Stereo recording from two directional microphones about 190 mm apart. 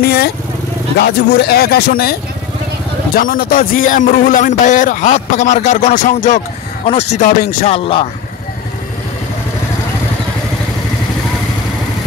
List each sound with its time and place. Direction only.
0.0 s speech: 55° left (ahead or behind)
3.2 s speech: 45° left (ahead or behind); by 8.1 s 30° left (ahead or behind)